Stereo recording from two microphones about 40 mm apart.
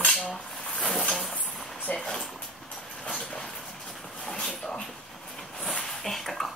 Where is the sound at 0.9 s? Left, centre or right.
Centre.